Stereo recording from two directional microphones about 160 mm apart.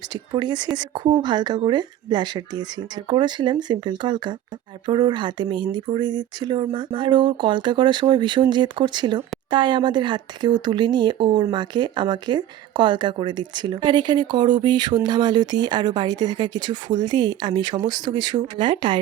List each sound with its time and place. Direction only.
0.1 s speech: 25° right (ahead or behind)